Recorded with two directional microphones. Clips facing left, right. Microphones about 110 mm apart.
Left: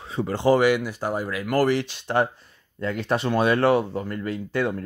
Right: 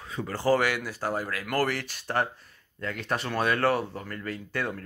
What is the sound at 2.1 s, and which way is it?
Speech, 20° left (ahead or behind).